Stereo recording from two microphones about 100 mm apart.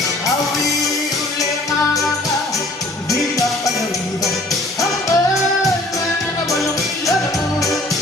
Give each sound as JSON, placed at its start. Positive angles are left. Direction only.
{"t": 4.8, "sound": "music", "side_deg": 35}